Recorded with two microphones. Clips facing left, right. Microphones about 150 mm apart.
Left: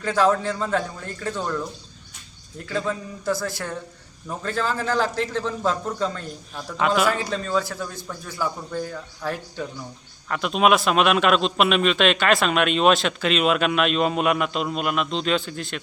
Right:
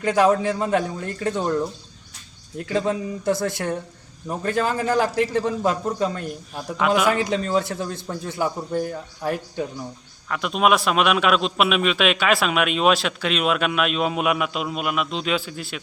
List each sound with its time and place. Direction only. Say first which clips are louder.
0.0 s a man's voice: right 2 dB; 15° right (ahead or behind)
2.6 s a man's voice: right 4 dB; 20° right (ahead or behind)
6.7 s a man's voice: right 1 dB; centre (ahead or behind)
7.2 s speech: right 3 dB; 15° right (ahead or behind)
10.2 s a man's voice: left 1 dB; centre (ahead or behind)